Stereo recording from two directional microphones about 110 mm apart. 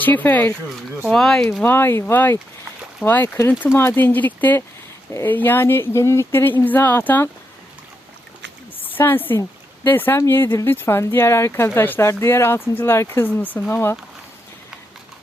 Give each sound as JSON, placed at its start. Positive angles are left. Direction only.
{"t": 0.0, "sound": "speech", "side_deg": 15}
{"t": 1.1, "sound": "speech", "side_deg": 5}
{"t": 1.6, "sound": "speech", "side_deg": 20}
{"t": 8.8, "sound": "a woman's voice", "side_deg": 20}